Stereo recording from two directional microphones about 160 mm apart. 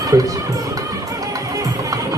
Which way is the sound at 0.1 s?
20° right (ahead or behind).